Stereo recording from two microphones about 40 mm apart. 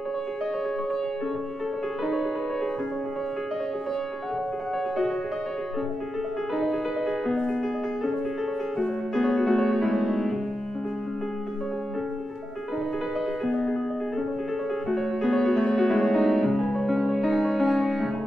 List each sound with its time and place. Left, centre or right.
6.5 s music: centre
8.7 s music: centre
13.5 s music: centre
14.9 s music: centre
17.6 s music: centre